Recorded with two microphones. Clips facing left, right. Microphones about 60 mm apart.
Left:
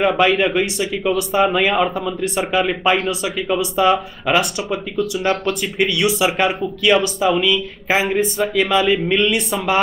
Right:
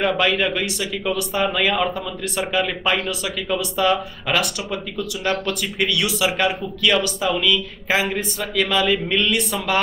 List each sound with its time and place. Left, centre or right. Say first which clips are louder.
0.0 s speech: left 4 dB; centre